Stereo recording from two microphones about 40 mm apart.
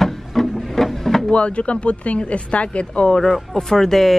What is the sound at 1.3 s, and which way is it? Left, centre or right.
Speech, left.